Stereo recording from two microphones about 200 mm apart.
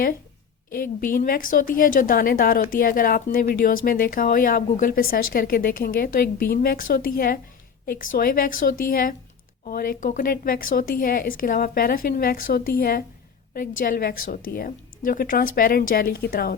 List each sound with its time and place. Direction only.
0.8 s a woman's voice: 45° left (ahead or behind)